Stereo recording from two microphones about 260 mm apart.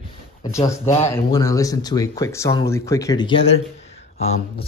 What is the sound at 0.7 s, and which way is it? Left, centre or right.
Speech, centre.